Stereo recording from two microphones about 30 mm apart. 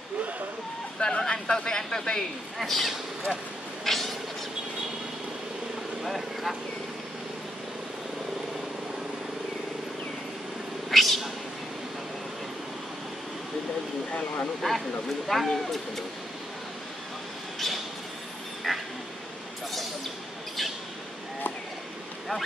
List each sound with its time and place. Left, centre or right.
0.9 s vehicle: left
1.2 s speech: left
2.6 s speech: centre
3.8 s cat: centre
6.0 s speech: centre
10.9 s cat: centre
14.6 s speech: centre
18.7 s a sound: centre